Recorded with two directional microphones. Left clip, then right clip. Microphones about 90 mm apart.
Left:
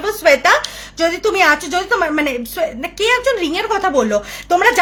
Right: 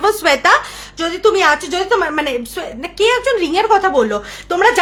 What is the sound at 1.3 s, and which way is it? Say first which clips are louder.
A woman's voice: even; 20° right (ahead or behind).